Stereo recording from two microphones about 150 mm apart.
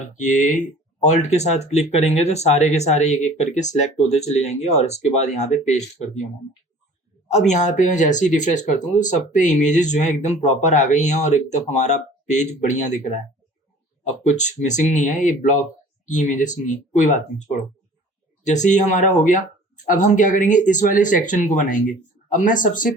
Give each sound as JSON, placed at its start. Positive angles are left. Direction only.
{"t": 0.2, "sound": "speech", "side_deg": 55}
{"t": 7.3, "sound": "speech", "side_deg": 50}
{"t": 14.0, "sound": "speech", "side_deg": 50}
{"t": 18.4, "sound": "speech", "side_deg": 55}